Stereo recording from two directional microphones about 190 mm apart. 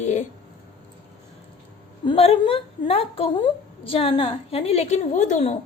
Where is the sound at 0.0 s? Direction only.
35° left (ahead or behind).